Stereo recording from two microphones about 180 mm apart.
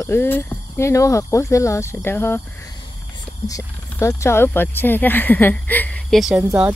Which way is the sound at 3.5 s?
15° left (ahead or behind).